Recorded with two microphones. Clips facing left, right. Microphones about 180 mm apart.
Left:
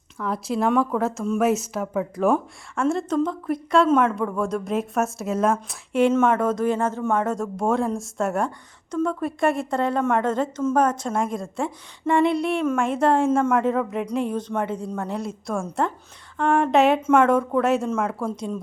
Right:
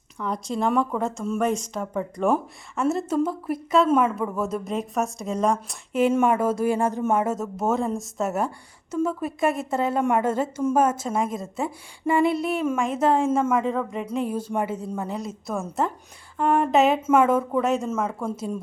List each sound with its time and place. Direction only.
0.2 s speech: 5° left (ahead or behind)